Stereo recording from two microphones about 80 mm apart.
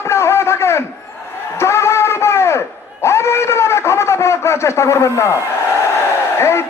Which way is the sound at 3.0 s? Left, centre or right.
Left.